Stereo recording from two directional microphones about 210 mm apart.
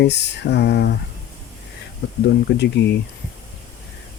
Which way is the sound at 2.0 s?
55° left (ahead or behind).